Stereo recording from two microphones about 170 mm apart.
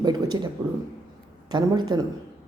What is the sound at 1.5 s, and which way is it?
Speech, 25° right (ahead or behind).